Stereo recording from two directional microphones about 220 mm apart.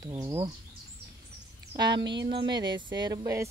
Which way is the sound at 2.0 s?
50° right (ahead or behind).